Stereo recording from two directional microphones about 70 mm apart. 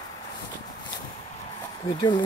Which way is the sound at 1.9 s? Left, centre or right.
Left.